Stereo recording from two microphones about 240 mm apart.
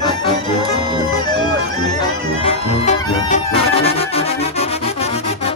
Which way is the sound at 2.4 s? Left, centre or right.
Left.